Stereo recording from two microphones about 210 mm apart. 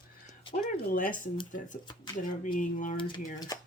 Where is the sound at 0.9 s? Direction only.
40° left (ahead or behind).